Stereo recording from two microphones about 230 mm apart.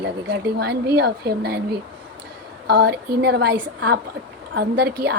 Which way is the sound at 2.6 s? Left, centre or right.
Right.